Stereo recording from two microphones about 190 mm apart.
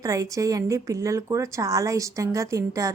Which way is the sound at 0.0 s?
20° right (ahead or behind).